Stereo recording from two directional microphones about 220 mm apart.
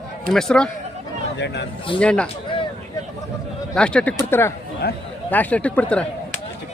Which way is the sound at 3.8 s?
5° left (ahead or behind).